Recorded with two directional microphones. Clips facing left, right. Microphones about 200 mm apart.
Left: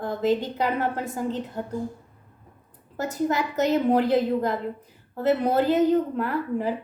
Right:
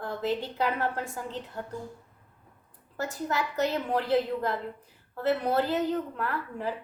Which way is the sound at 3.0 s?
20° left (ahead or behind).